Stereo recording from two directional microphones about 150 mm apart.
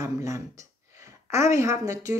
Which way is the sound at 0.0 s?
20° right (ahead or behind).